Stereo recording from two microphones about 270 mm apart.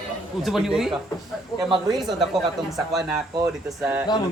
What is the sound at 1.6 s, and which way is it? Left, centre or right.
Speech, centre.